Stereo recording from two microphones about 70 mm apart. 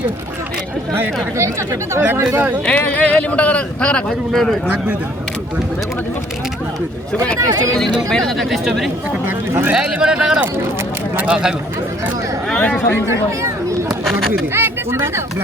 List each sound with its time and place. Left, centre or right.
0.9 s speech: right
2.6 s speech: centre
4.3 s speech: centre
7.3 s speech: right
8.1 s speech: centre
9.2 s speech: right
9.7 s a man's voice: centre
12.5 s a sound: centre
14.5 s speech: right